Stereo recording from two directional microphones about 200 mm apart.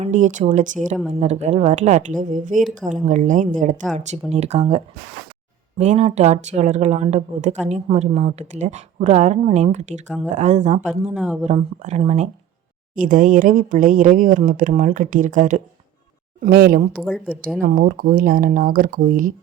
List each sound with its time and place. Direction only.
0.0 s speech: 40° right (ahead or behind)
11.1 s speech: 5° right (ahead or behind)
11.4 s speech: 35° right (ahead or behind)
17.0 s speech: 5° left (ahead or behind)
17.6 s speech: 45° right (ahead or behind)